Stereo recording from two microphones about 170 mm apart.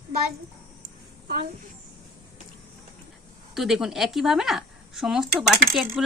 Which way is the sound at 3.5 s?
Centre (ahead or behind).